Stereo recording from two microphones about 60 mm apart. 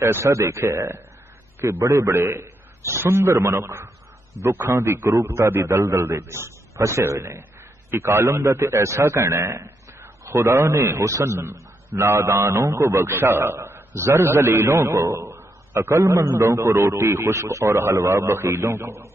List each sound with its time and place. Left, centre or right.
0.0 s a man's voice: right
1.9 s a man's voice: right
15.2 s a sound: right
16.0 s a man's voice: right